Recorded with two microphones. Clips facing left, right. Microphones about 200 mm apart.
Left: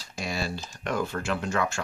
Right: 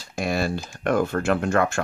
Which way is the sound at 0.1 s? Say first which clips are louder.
Right 7 dB; 55° right (ahead or behind).